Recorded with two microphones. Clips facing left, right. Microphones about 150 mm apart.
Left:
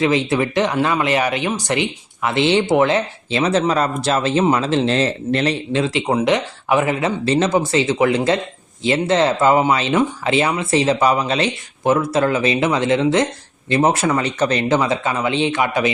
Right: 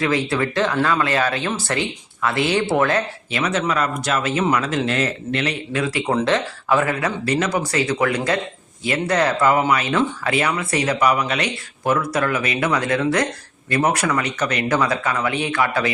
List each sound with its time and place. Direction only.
0.0 s speech: 20° left (ahead or behind)